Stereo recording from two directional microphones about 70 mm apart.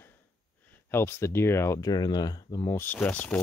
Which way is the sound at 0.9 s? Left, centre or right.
Left.